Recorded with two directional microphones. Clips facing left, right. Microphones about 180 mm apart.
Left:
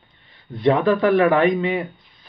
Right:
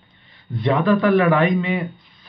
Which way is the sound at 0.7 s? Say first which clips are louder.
Left 1 dB; 35° left (ahead or behind).